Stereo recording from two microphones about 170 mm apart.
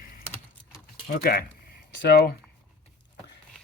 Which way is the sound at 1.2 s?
60° left (ahead or behind).